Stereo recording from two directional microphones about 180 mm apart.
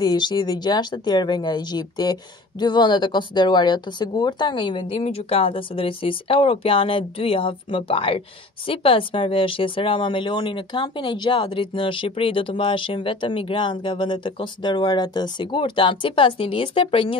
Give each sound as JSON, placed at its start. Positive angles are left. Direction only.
{"t": 0.0, "sound": "speech", "side_deg": 25}